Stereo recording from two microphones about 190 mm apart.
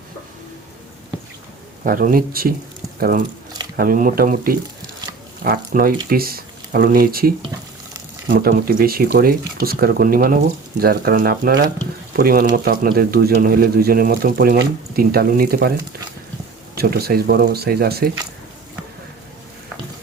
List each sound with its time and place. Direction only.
1.8 s speech: 45° right (ahead or behind)
16.7 s speech: 55° right (ahead or behind)